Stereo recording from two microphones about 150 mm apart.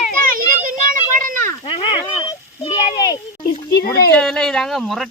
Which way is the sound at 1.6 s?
35° left (ahead or behind).